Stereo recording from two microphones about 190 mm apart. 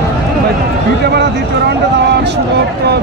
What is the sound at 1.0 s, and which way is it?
Speech, 60° right (ahead or behind).